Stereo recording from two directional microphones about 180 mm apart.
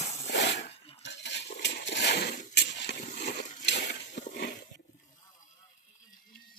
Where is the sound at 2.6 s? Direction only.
70° left (ahead or behind).